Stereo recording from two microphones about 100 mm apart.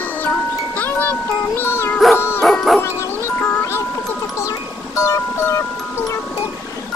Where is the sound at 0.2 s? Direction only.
15° left (ahead or behind).